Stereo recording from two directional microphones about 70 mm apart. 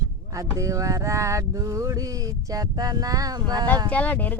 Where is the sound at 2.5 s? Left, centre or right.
Right.